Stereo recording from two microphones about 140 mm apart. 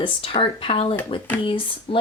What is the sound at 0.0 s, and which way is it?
Speech, 40° left (ahead or behind).